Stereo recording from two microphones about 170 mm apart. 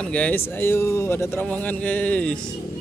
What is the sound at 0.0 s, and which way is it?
Speech, 5° left (ahead or behind).